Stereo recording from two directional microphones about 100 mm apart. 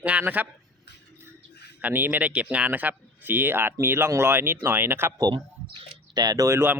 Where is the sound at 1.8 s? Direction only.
20° right (ahead or behind).